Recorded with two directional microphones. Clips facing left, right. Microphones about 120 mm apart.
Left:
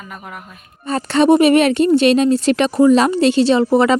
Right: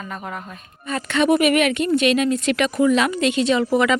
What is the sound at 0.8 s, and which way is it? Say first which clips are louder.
Speech: left 6 dB; 35° left (ahead or behind).